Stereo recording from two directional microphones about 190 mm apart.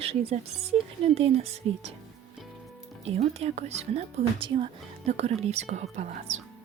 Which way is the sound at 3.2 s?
35° right (ahead or behind).